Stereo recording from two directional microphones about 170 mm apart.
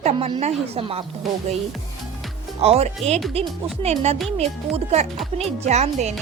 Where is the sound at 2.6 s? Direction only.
35° right (ahead or behind).